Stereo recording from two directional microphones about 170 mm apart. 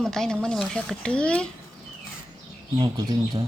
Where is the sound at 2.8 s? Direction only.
25° right (ahead or behind).